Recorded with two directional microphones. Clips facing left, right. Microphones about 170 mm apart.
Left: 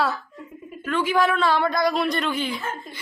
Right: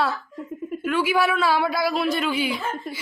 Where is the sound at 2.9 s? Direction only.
65° right (ahead or behind).